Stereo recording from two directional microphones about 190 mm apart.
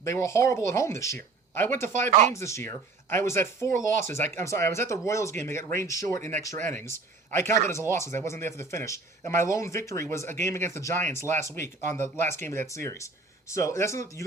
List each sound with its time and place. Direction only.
0.0 s speech: 15° left (ahead or behind)